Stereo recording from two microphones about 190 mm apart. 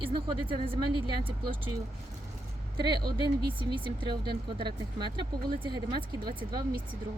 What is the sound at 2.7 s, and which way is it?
Speech, 25° right (ahead or behind).